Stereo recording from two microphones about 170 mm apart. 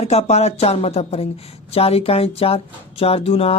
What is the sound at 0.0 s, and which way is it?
Speech, 40° left (ahead or behind).